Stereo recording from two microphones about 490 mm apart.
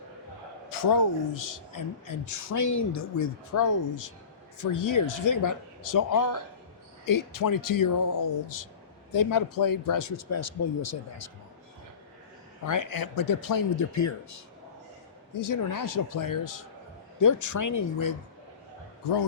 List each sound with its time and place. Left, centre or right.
0.7 s speech: left
9.1 s speech: left
12.6 s speech: left